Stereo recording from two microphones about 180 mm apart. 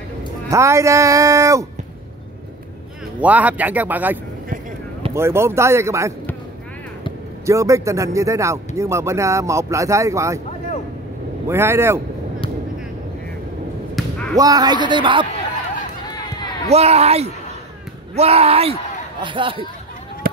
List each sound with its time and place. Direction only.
0.5 s speech: 15° right (ahead or behind)
3.2 s speech: 10° right (ahead or behind)
7.4 s speech: 15° right (ahead or behind)
11.4 s speech: 15° right (ahead or behind)
13.9 s a sound: 5° left (ahead or behind)
14.3 s a man's voice: 20° right (ahead or behind)
16.6 s a man's voice: 35° right (ahead or behind)